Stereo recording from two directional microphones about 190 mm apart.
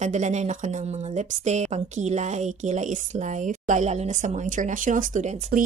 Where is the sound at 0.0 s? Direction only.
40° right (ahead or behind).